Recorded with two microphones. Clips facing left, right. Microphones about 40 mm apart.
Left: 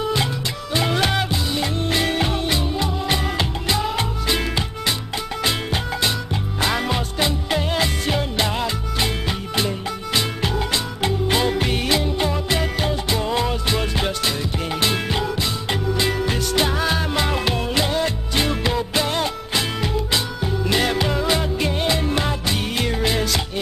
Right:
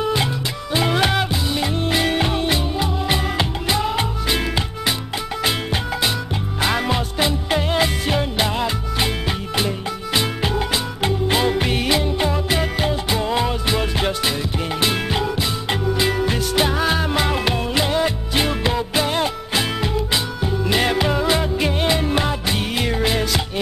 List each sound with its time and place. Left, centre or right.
0.0 s music: centre
6.6 s music: centre
10.1 s music: centre